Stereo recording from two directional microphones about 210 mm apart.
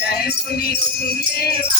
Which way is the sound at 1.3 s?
50° left (ahead or behind).